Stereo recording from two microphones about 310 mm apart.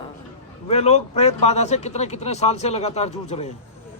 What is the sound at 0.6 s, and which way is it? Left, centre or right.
A man's voice, centre.